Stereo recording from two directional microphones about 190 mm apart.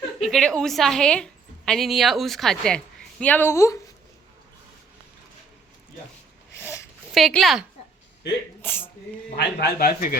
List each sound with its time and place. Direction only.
0.3 s a woman's voice: 5° left (ahead or behind)
7.1 s a woman's voice: centre (ahead or behind)
8.6 s speech: 10° left (ahead or behind)
9.3 s a man's voice: 55° left (ahead or behind)